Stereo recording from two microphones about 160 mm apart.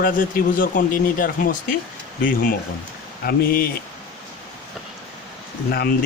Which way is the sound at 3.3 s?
70° left (ahead or behind).